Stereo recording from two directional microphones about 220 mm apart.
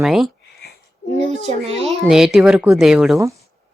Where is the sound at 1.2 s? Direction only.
30° right (ahead or behind).